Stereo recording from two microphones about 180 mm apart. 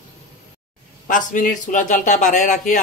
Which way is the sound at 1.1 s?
45° left (ahead or behind).